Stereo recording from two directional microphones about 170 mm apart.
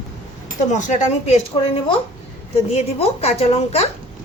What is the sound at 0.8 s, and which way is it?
Speech, 45° left (ahead or behind).